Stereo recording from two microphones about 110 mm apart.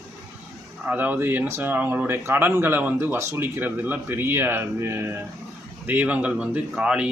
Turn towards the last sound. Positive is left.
turn(degrees=-10)  # may be behind; listen again after turning